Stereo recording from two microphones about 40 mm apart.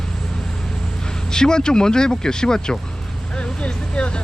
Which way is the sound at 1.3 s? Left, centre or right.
Centre.